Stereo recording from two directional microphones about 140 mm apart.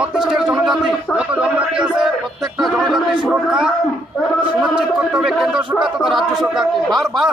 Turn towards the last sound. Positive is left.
turn(degrees=0)  # may be behind; listen again after turning